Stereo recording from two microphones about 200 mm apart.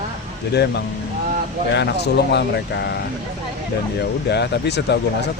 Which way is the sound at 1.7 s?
60° left (ahead or behind).